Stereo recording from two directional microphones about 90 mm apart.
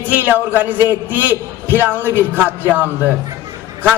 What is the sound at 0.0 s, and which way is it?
Speech, 20° right (ahead or behind).